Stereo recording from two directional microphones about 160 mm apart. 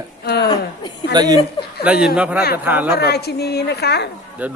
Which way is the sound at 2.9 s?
90° left.